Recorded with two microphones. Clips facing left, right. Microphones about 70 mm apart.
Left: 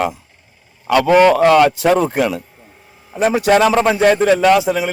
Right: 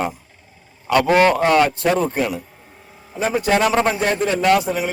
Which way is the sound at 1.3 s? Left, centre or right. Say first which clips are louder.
Left 5 dB; left.